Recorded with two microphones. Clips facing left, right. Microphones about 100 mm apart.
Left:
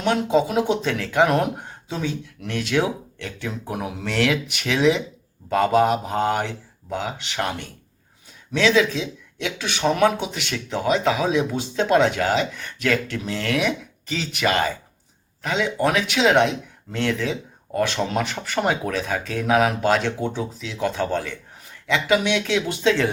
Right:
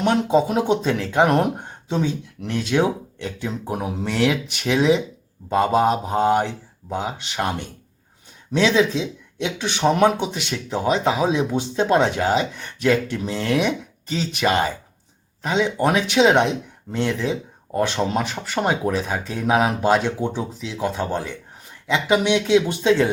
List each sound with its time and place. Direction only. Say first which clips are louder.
0.0 s speech: right 2 dB; 30° right (ahead or behind)
0.7 s speech: right 2 dB; 20° right (ahead or behind)
3.2 s speech: right 2 dB; 20° right (ahead or behind)
3.7 s speech: right 3 dB; 30° right (ahead or behind)
4.0 s speech: right 1 dB; 15° right (ahead or behind)
8.5 s speech: right 1 dB; 25° right (ahead or behind)